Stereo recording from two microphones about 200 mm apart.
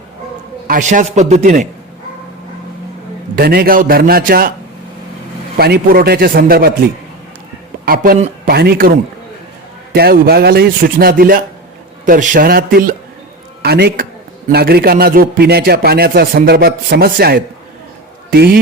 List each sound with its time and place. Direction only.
0.7 s a man's voice: 40° right (ahead or behind)
3.3 s a man's voice: 50° right (ahead or behind)
5.5 s a man's voice: 50° right (ahead or behind)
7.9 s a man's voice: 45° right (ahead or behind)
9.9 s a man's voice: 50° right (ahead or behind)